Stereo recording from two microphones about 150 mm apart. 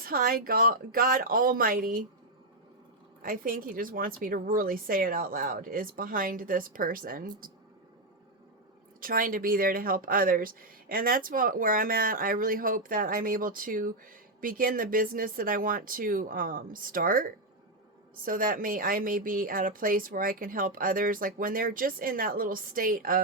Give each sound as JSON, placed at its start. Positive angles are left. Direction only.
{"t": 0.0, "sound": "speech", "side_deg": -80}
{"t": 3.2, "sound": "speech", "side_deg": -70}
{"t": 9.0, "sound": "speech", "side_deg": -70}